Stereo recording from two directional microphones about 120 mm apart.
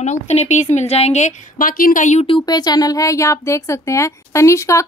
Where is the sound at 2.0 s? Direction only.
80° left.